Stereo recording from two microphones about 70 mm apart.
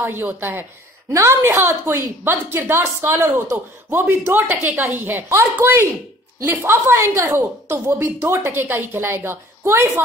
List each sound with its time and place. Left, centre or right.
0.0 s a woman's voice: right